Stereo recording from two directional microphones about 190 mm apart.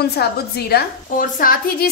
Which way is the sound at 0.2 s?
55° left (ahead or behind).